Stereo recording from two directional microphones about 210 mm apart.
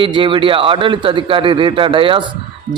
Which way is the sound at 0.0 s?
25° right (ahead or behind).